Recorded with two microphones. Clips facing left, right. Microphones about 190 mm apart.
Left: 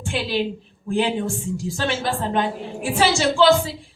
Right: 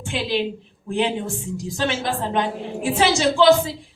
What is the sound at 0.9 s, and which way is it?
A woman's voice, 20° right (ahead or behind).